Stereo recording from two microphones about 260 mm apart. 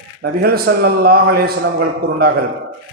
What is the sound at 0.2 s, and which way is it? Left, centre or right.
A man's voice, right.